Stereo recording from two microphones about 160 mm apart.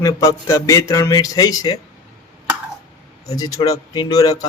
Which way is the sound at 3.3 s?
25° left (ahead or behind).